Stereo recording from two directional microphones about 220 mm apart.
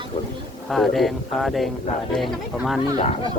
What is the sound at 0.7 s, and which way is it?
Speech, centre (ahead or behind).